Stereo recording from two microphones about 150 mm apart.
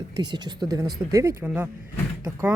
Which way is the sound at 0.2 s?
30° right (ahead or behind).